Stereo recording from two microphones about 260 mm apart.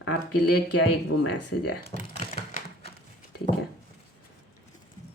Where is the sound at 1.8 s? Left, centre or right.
Left.